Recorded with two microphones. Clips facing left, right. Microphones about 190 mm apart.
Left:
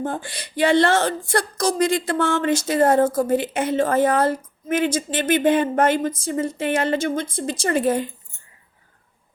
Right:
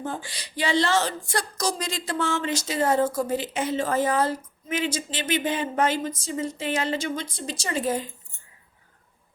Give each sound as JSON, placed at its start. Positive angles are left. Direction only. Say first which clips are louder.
{"t": 0.0, "sound": "speech", "louder": "left 6 dB", "side_deg": 55}